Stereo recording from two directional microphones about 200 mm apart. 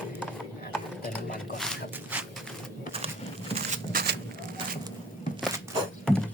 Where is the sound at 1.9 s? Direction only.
10° right (ahead or behind).